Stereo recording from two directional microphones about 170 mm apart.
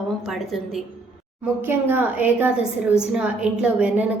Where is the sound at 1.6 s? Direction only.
15° right (ahead or behind).